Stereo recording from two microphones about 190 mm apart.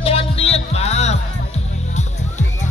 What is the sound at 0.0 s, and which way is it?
Music, 30° left (ahead or behind).